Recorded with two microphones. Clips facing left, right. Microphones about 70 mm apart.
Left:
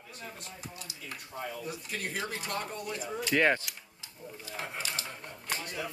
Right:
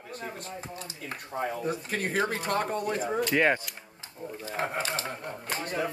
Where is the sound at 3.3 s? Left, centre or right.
Centre.